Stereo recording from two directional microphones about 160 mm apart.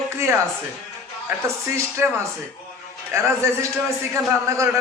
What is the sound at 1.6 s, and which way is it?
A man's voice, 15° right (ahead or behind).